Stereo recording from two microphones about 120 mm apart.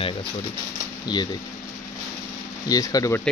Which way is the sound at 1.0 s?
35° left (ahead or behind).